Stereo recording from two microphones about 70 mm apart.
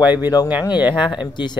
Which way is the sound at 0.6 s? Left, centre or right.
Left.